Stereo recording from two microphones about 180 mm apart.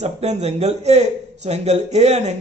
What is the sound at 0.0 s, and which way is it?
A man's voice, 40° right (ahead or behind).